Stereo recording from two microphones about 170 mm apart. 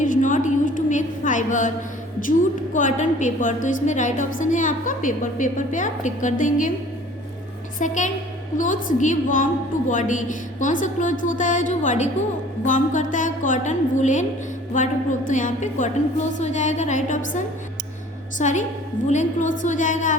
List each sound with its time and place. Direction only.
0.0 s a sound: 50° left (ahead or behind)
2.7 s a woman's voice: 50° left (ahead or behind)
7.8 s a woman's voice: 50° left (ahead or behind)